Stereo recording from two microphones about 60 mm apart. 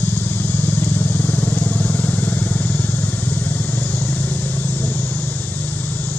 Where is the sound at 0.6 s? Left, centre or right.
Left.